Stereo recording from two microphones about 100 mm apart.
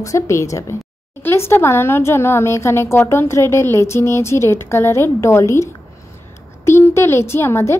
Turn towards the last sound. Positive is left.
turn(degrees=25)  # may be behind; listen again after turning